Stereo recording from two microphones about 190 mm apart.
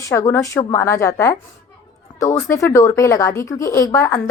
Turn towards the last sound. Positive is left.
turn(degrees=15)  # may be behind; listen again after turning